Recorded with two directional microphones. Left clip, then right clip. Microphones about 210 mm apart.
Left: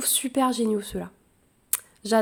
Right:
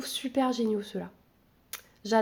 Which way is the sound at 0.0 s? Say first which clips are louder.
Left 5 dB; 30° left (ahead or behind).